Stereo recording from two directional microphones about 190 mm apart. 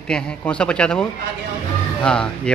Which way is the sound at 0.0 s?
5° left (ahead or behind).